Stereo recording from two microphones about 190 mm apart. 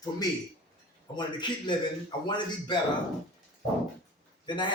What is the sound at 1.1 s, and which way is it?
A man's voice, 25° left (ahead or behind).